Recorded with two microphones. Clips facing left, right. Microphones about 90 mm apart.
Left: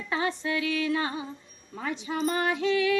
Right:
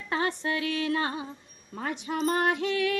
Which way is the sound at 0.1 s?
50° right (ahead or behind).